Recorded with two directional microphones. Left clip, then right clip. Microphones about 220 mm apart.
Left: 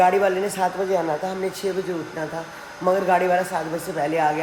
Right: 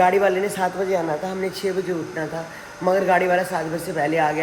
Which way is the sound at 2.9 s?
15° left (ahead or behind).